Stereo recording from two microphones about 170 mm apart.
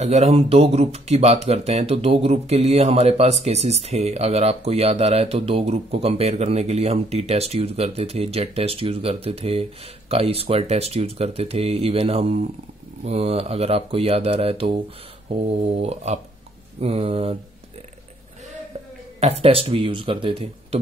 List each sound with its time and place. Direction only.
0.0 s speech: 40° right (ahead or behind)
19.1 s speech: 40° right (ahead or behind)